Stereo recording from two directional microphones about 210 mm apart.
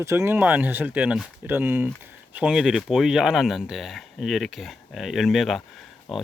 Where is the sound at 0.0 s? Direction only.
15° right (ahead or behind).